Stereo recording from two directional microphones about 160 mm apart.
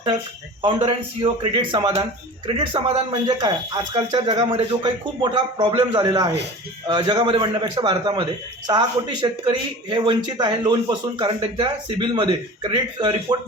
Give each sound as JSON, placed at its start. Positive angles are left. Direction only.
{"t": 0.6, "sound": "a man's voice", "side_deg": -35}